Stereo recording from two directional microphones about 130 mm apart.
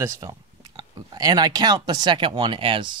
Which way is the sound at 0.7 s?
30° right (ahead or behind).